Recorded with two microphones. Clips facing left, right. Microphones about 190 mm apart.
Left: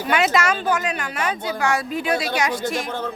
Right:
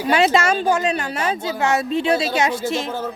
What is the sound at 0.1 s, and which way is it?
A woman's voice, 30° right (ahead or behind).